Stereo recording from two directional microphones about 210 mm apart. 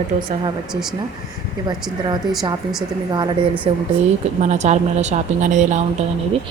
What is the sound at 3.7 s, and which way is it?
Speech, 30° right (ahead or behind).